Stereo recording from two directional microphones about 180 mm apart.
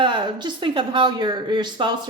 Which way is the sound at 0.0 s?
25° right (ahead or behind).